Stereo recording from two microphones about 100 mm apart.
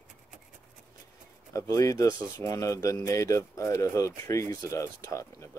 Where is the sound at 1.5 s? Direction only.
35° left (ahead or behind).